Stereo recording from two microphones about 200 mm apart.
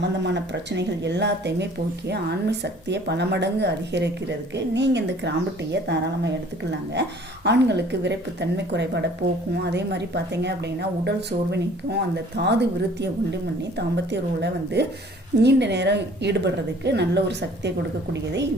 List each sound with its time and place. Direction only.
0.0 s speech: 60° right (ahead or behind)